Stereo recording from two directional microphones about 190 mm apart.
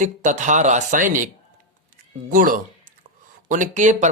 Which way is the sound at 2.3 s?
45° right (ahead or behind).